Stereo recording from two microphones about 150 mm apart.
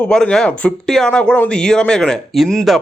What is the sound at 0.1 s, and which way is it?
Speech, 5° left (ahead or behind).